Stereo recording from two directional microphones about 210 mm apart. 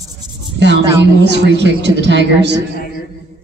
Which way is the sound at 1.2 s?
55° right (ahead or behind).